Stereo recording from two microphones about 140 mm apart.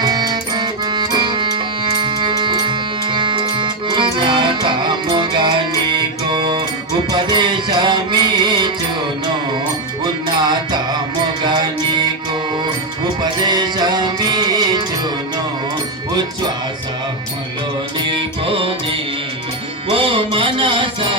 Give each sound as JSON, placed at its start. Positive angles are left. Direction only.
{"t": 0.0, "sound": "accordion", "side_deg": -30}
{"t": 7.1, "sound": "music", "side_deg": -35}
{"t": 10.0, "sound": "music", "side_deg": -30}
{"t": 13.4, "sound": "music", "side_deg": -30}
{"t": 18.0, "sound": "music", "side_deg": -35}
{"t": 19.9, "sound": "music", "side_deg": -40}